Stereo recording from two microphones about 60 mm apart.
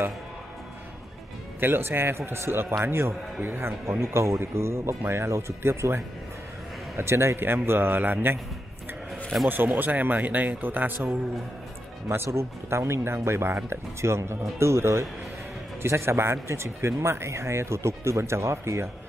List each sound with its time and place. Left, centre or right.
1.6 s speech: right
4.0 s speech: right
9.5 s speech: right
12.1 s speech: right